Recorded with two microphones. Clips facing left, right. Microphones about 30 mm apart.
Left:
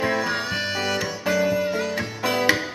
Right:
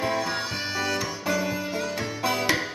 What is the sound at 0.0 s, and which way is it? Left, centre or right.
Music, centre.